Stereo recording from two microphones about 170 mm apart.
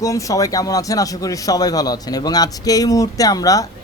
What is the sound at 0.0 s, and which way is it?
A man's voice, 20° left (ahead or behind).